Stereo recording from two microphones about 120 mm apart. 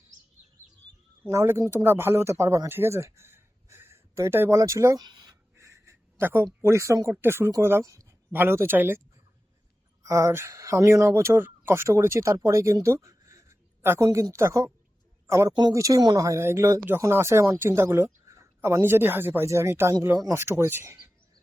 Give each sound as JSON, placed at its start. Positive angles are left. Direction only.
{"t": 1.3, "sound": "speech", "side_deg": -25}
{"t": 5.5, "sound": "speech", "side_deg": -25}
{"t": 10.0, "sound": "speech", "side_deg": -25}